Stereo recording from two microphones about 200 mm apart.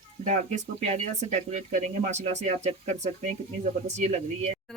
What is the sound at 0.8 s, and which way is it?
Speech, 35° right (ahead or behind).